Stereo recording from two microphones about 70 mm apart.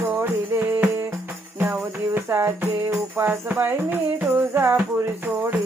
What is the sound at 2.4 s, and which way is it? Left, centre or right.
Music, right.